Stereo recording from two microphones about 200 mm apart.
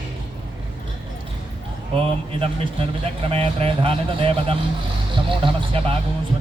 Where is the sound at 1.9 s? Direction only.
25° right (ahead or behind).